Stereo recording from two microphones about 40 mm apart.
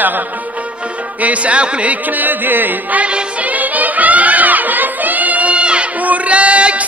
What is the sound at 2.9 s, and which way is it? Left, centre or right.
Music, right.